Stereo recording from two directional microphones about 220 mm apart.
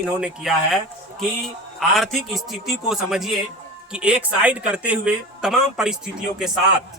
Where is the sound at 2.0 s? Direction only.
Centre (ahead or behind).